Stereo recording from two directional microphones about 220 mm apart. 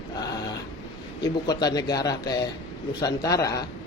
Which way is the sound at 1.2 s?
20° left (ahead or behind).